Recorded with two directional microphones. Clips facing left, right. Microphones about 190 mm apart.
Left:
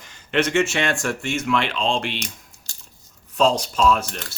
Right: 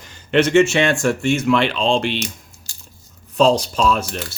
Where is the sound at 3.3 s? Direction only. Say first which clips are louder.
Right 4 dB; 30° right (ahead or behind).